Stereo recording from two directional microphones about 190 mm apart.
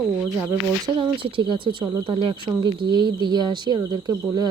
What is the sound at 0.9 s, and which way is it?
Speech, 25° right (ahead or behind).